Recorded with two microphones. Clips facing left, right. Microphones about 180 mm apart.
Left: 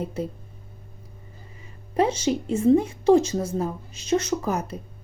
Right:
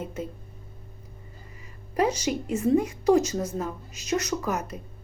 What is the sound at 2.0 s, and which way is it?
A woman's voice, 30° left (ahead or behind).